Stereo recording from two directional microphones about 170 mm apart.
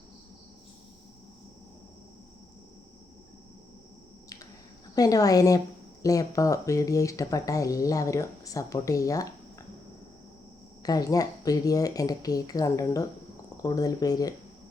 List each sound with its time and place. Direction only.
4.9 s speech: 20° left (ahead or behind)
10.8 s speech: 20° left (ahead or behind)